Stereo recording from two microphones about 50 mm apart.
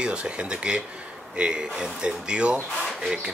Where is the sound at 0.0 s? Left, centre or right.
Right.